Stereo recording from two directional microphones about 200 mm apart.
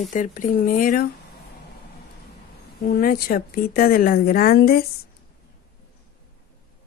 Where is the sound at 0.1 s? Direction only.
40° left (ahead or behind).